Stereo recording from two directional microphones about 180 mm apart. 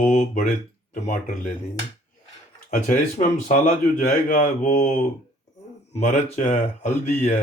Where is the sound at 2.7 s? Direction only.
45° left (ahead or behind).